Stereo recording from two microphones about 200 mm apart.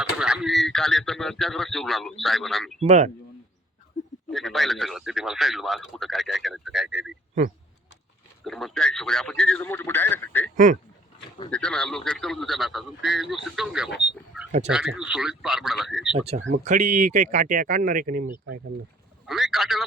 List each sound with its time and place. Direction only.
0.0 s a man's voice: 5° right (ahead or behind)
2.8 s speech: 35° right (ahead or behind)
4.3 s speech: centre (ahead or behind)
8.4 s speech: centre (ahead or behind)
11.5 s speech: 5° left (ahead or behind)
16.1 s speech: 30° right (ahead or behind); by 18.6 s 45° right (ahead or behind)
19.2 s speech: centre (ahead or behind)